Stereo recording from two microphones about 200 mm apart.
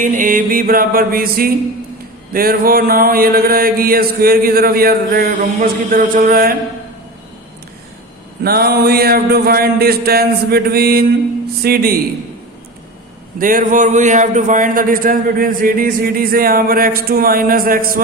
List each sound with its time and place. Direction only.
0.0 s speech: 40° right (ahead or behind)
8.4 s speech: 50° right (ahead or behind)
13.4 s speech: 45° right (ahead or behind)